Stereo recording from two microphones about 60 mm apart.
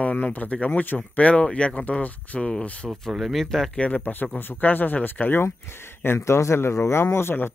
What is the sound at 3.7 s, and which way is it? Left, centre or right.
Speech, left.